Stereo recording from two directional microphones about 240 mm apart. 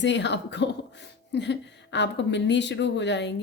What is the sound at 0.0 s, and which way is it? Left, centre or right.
Speech, left.